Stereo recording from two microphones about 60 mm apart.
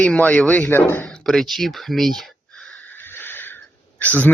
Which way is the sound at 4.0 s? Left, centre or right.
Left.